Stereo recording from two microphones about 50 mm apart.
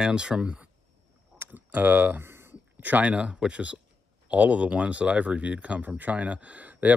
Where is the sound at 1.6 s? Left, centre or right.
Right.